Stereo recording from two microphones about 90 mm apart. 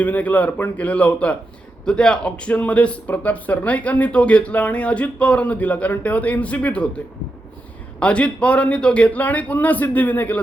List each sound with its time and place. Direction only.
0.0 s a man's voice: 20° left (ahead or behind)
7.9 s a man's voice: 15° left (ahead or behind)